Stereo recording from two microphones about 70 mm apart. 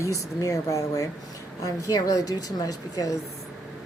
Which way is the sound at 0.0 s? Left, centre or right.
Left.